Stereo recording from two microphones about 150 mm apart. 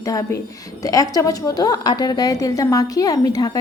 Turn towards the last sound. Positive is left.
turn(degrees=25)  # may be behind; listen again after turning